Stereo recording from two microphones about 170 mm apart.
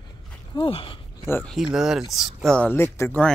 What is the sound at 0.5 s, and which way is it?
Speech, 30° left (ahead or behind).